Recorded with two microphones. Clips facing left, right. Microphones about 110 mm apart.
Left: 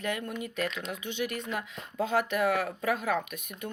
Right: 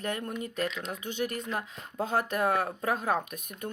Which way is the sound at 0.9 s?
40° right (ahead or behind).